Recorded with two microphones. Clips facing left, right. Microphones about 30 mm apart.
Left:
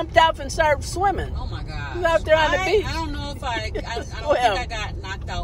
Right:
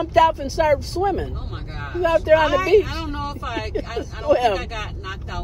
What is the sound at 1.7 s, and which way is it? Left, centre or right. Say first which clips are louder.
Speech: right 1 dB; left.